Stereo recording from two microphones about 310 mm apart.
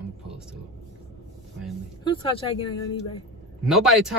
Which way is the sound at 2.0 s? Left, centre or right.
Centre.